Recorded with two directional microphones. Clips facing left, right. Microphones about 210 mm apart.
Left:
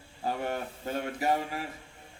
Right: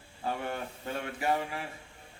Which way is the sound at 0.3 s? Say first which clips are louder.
Left 2 dB; 40° left (ahead or behind).